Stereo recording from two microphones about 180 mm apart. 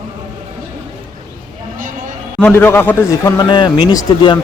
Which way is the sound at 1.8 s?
50° right (ahead or behind).